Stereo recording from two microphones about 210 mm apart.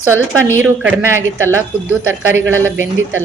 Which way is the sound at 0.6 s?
10° right (ahead or behind).